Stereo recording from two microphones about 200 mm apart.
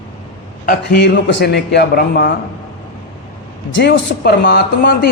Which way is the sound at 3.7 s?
60° left (ahead or behind).